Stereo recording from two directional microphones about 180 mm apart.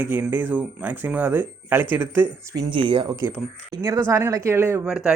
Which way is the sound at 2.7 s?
25° right (ahead or behind).